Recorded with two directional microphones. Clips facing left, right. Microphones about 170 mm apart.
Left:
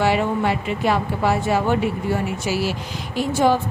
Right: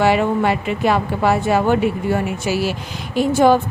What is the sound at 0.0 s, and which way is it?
Speech, 60° right (ahead or behind).